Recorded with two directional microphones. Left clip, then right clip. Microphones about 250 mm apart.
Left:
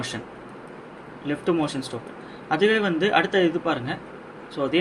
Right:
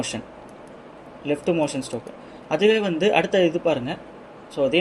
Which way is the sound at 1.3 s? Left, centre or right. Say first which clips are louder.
Right 2 dB; right.